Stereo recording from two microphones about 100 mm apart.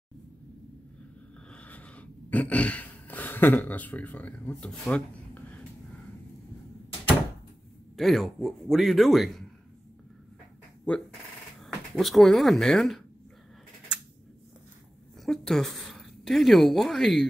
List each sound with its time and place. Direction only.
1.5 s gasp: 15° left (ahead or behind)
7.9 s a man's voice: centre (ahead or behind)
10.9 s speech: 15° left (ahead or behind)
11.6 s speech: centre (ahead or behind)
15.2 s a woman's voice: 5° left (ahead or behind)